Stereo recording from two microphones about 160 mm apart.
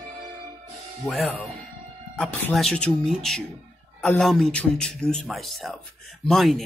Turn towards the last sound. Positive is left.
turn(degrees=0)  # may be behind; listen again after turning